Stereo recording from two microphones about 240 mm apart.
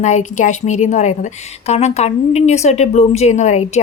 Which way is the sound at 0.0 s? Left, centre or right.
Left.